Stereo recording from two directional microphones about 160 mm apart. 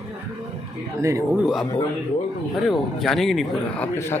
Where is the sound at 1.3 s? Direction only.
Centre (ahead or behind).